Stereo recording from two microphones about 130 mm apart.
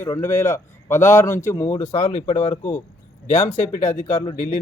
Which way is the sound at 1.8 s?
60° left (ahead or behind).